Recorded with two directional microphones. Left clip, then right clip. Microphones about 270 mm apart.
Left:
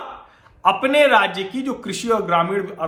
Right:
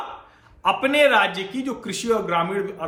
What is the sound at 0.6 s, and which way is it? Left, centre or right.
A man's voice, centre.